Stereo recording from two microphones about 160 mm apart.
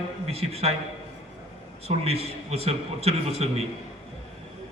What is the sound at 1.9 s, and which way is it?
A man's voice, 40° right (ahead or behind).